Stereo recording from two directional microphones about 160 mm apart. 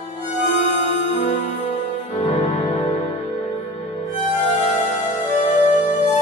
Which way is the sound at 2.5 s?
40° left (ahead or behind).